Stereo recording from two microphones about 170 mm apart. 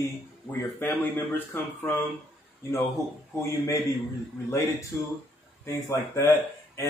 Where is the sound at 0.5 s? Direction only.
10° left (ahead or behind).